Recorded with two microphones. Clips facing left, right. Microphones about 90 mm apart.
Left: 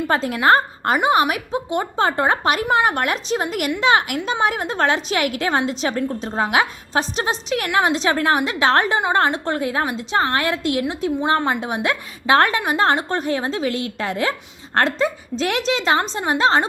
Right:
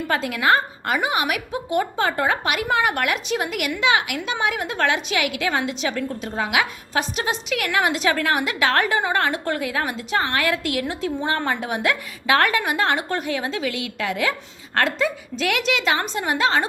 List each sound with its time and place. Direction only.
0.1 s a woman's voice: 30° left (ahead or behind)